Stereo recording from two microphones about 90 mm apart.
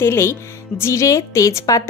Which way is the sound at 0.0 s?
30° left (ahead or behind).